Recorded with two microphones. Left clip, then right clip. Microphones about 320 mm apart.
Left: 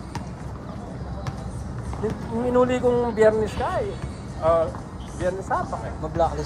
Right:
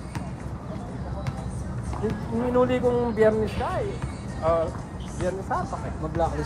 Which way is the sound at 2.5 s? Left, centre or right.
Left.